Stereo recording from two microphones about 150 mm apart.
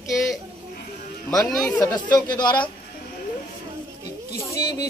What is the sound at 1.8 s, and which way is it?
Speech, 30° left (ahead or behind).